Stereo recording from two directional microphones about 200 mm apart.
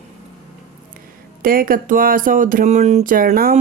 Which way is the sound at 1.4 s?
45° right (ahead or behind).